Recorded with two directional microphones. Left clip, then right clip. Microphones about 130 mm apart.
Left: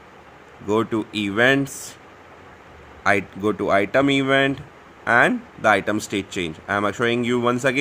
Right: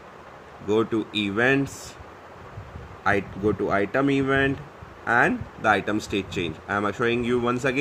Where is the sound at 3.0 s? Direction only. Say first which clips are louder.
Left 3 dB; 40° left (ahead or behind).